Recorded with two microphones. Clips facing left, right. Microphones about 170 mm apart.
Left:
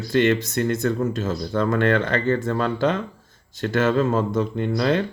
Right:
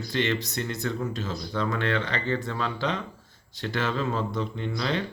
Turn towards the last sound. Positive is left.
turn(degrees=50)  # may be behind; listen again after turning